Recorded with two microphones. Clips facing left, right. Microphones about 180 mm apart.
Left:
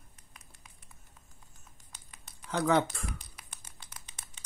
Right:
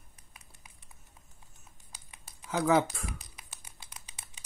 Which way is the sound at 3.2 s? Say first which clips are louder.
Even; 15° right (ahead or behind).